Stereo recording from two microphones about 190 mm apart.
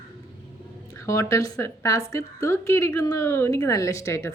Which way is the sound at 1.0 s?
15° left (ahead or behind).